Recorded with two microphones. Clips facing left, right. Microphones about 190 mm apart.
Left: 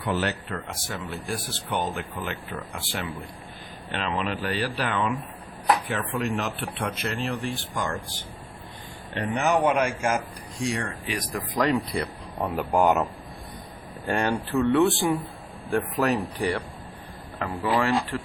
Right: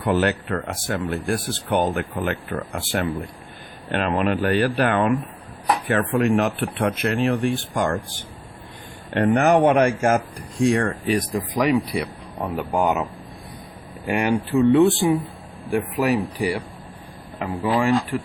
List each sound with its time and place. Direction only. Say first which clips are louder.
0.0 s speech: right 7 dB; 45° right (ahead or behind)
9.1 s speech: right 7 dB; 55° right (ahead or behind)
11.2 s speech: right 6 dB; 25° right (ahead or behind)
11.5 s speech: right 3 dB; 10° right (ahead or behind)
15.7 s speech: right 3 dB; 10° right (ahead or behind)